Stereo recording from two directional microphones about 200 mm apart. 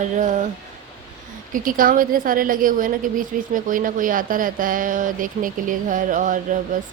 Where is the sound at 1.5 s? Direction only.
45° right (ahead or behind).